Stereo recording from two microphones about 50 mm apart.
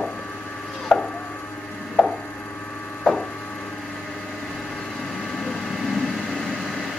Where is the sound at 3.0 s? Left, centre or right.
Centre.